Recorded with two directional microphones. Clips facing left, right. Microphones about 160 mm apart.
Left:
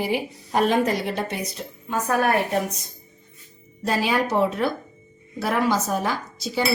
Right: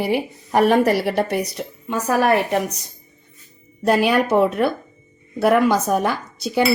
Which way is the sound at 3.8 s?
65° right (ahead or behind).